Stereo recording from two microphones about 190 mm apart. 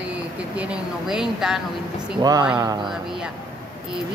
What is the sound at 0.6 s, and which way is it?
A woman's voice, 5° right (ahead or behind).